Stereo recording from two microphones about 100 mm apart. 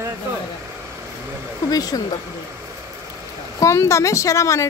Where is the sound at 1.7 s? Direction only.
40° left (ahead or behind).